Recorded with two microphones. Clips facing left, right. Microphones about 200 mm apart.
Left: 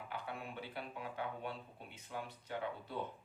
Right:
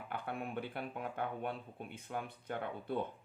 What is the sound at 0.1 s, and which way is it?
Speech, 55° right (ahead or behind).